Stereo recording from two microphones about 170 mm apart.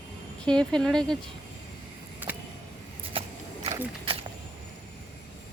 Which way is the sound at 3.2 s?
35° right (ahead or behind).